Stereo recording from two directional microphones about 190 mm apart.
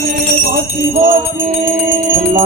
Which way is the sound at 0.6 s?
45° right (ahead or behind).